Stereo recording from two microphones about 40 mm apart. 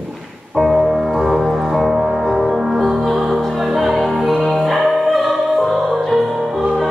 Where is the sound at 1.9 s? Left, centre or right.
Right.